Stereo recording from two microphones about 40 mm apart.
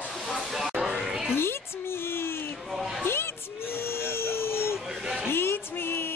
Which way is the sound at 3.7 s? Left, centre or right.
Left.